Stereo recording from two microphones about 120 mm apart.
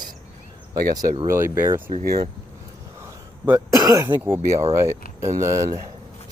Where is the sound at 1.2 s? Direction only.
25° right (ahead or behind).